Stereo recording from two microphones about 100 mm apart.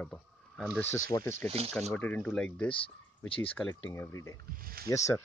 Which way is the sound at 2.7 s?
65° left (ahead or behind).